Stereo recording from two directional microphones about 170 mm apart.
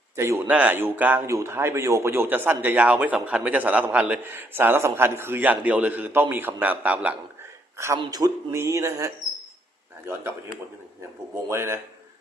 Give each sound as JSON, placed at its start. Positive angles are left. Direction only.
{"t": 0.2, "sound": "speech", "side_deg": -15}
{"t": 7.9, "sound": "speech", "side_deg": -20}
{"t": 11.4, "sound": "speech", "side_deg": -15}